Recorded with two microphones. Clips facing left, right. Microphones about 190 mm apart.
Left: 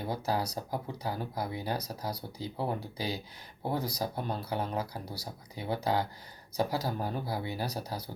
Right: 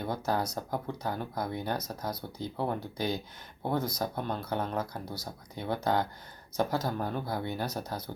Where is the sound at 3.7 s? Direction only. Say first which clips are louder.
Right 3 dB; 35° left (ahead or behind).